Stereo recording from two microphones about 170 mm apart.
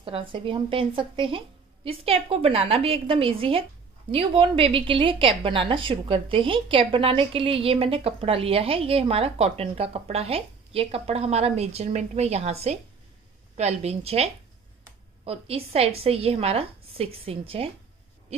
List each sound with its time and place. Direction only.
0.0 s a woman's voice: 30° right (ahead or behind)